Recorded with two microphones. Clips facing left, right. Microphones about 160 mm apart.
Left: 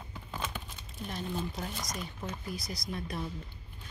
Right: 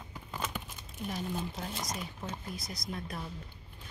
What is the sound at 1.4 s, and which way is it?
Speech, 25° right (ahead or behind).